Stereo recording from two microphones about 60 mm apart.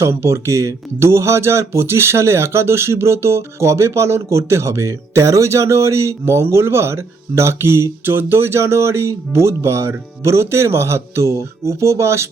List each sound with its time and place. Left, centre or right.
0.1 s speech: right